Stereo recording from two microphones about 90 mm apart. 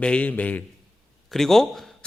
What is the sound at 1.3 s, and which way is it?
Speech, 5° left (ahead or behind).